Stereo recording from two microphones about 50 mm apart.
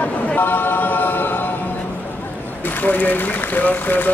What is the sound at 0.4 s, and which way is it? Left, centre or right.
A capella, left.